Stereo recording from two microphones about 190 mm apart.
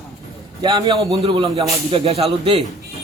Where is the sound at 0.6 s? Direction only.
20° right (ahead or behind).